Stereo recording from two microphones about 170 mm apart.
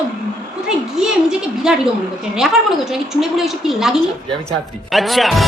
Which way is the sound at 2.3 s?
Centre (ahead or behind).